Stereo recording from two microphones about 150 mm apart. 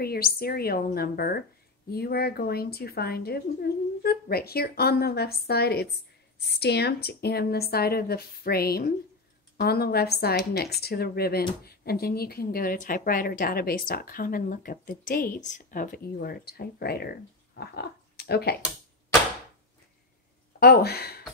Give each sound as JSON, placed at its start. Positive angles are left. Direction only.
{"t": 0.0, "sound": "a woman's voice", "side_deg": 90}
{"t": 20.5, "sound": "a woman's voice", "side_deg": 90}